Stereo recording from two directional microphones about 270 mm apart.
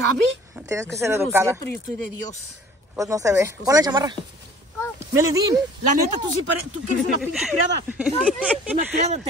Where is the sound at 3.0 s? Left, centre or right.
Centre.